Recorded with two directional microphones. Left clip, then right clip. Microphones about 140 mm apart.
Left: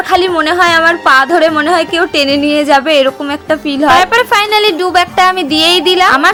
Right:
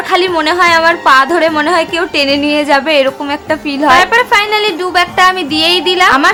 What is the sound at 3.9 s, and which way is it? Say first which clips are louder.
A woman's voice: right 1 dB; 35° left (ahead or behind).